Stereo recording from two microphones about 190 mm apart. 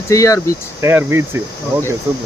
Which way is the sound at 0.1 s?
15° left (ahead or behind).